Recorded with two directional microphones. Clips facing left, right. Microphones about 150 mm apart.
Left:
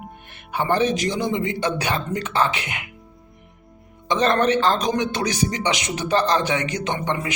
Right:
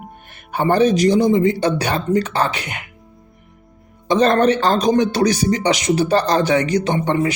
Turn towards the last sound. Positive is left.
turn(degrees=-35)  # may be behind; listen again after turning